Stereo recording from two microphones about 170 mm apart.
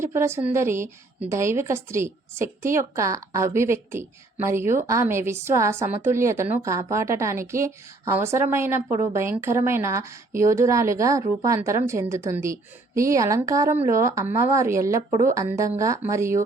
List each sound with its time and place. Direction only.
0.0 s a woman's voice: 15° right (ahead or behind)